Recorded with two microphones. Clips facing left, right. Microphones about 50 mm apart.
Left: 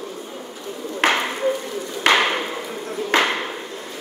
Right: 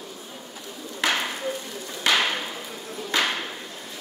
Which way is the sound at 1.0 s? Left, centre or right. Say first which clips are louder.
Left 6 dB; left.